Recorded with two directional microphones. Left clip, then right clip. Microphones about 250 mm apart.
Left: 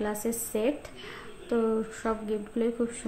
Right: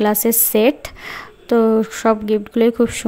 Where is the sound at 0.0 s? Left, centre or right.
Right.